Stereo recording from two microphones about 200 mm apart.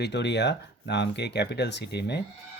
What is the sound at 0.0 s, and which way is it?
Speech, 60° left (ahead or behind).